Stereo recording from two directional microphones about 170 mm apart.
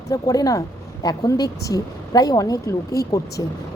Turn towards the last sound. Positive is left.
turn(degrees=20)  # may be behind; listen again after turning